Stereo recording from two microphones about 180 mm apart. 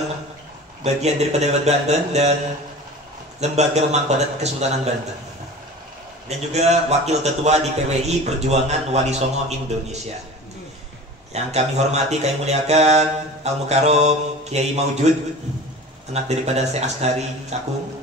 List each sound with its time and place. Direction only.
0.8 s mantra: 40° right (ahead or behind)
3.3 s mantra: 40° right (ahead or behind)
6.2 s mantra: 40° right (ahead or behind)
11.3 s mantra: 40° right (ahead or behind)
16.1 s mantra: 35° right (ahead or behind)